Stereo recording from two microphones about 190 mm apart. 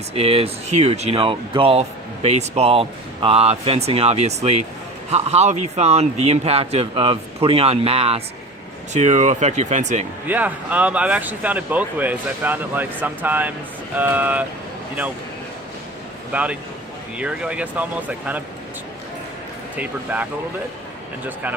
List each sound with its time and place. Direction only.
0.1 s speech: 30° right (ahead or behind)
10.2 s speech: 10° right (ahead or behind)
16.3 s speech: 5° right (ahead or behind)
19.7 s speech: 10° right (ahead or behind)